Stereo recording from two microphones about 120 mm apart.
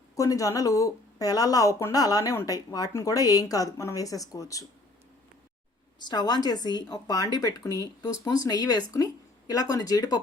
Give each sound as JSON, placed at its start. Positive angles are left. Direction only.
{"t": 0.2, "sound": "speech", "side_deg": 30}
{"t": 6.0, "sound": "a woman's voice", "side_deg": 35}